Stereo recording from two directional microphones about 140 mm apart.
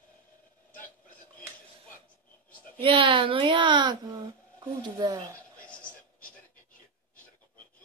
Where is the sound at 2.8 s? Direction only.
40° right (ahead or behind).